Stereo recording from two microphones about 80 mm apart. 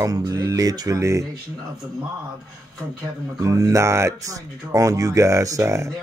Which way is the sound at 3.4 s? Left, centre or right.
Right.